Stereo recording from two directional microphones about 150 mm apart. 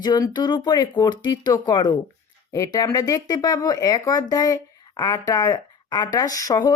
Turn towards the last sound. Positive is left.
turn(degrees=25)  # may be behind; listen again after turning